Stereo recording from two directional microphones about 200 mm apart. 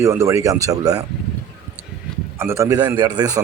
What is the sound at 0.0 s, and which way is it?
Speech, 15° right (ahead or behind).